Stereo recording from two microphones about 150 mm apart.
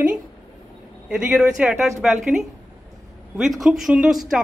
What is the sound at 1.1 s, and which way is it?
A woman's voice, 5° right (ahead or behind).